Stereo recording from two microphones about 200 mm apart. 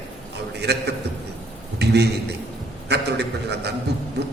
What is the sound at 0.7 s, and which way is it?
A man's voice, 55° right (ahead or behind).